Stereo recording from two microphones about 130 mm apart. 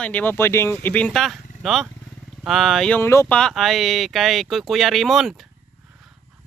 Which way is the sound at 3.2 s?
5° left (ahead or behind).